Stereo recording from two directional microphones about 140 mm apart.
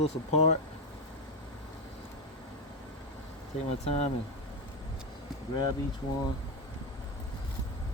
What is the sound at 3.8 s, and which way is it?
Speech, 45° left (ahead or behind).